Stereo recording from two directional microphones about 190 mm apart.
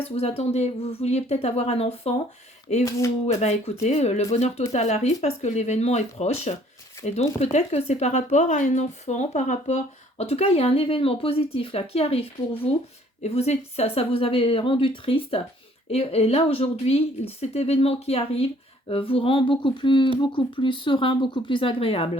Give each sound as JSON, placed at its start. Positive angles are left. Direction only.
{"t": 0.0, "sound": "speech", "side_deg": 30}